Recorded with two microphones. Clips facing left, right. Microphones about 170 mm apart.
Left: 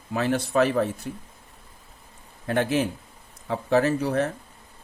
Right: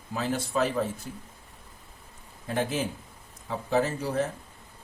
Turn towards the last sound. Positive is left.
turn(degrees=65)  # may be behind; listen again after turning